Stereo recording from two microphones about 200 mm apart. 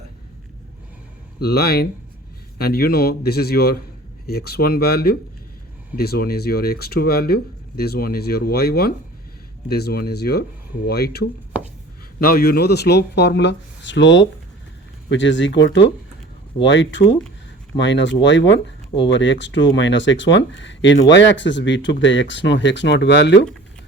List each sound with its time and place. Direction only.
1.4 s speech: 50° left (ahead or behind)